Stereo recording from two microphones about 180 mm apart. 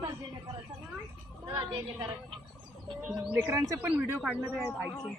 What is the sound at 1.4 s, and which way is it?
Speech, 25° right (ahead or behind).